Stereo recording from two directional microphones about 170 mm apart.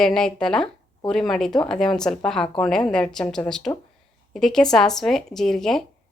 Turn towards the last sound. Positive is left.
turn(degrees=0)  # may be behind; listen again after turning